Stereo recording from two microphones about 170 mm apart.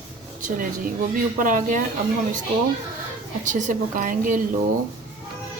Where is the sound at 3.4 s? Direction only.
50° right (ahead or behind).